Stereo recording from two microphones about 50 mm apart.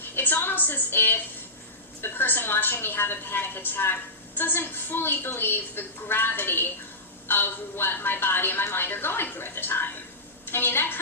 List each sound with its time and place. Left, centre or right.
0.0 s music: left
2.0 s a woman's voice: left